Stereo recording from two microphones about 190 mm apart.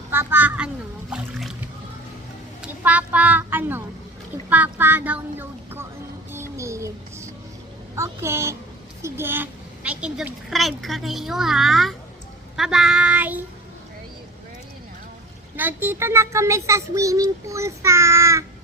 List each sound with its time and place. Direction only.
0.1 s a child's voice: 10° right (ahead or behind)
2.6 s a woman's voice: 10° right (ahead or behind)
6.3 s a sound: 15° right (ahead or behind)
7.9 s a child's voice: 15° right (ahead or behind)
15.5 s a child's voice: 10° right (ahead or behind)